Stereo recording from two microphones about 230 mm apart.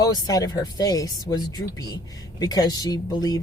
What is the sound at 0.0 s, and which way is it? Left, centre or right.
Speech, centre.